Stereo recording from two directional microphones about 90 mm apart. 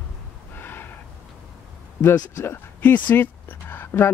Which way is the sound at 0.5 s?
20° left (ahead or behind).